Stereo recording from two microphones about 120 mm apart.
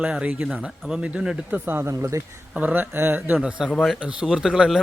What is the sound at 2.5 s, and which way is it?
Speech, 15° right (ahead or behind).